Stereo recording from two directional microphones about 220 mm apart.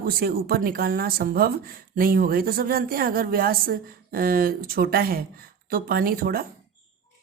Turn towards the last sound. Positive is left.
turn(degrees=-45)  # may be behind; listen again after turning